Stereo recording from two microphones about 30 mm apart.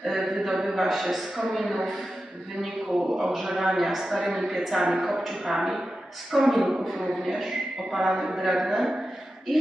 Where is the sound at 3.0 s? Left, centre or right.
Centre.